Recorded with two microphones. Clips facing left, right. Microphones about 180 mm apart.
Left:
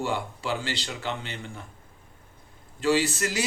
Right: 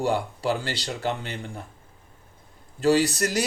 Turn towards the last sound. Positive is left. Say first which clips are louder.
# right 3 dB
turn(degrees=-40)  # may be behind; listen again after turning